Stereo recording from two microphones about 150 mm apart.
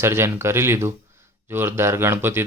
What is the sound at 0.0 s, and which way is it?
Speech, 15° right (ahead or behind).